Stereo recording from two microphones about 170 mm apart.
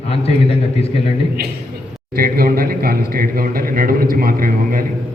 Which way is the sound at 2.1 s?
60° right (ahead or behind).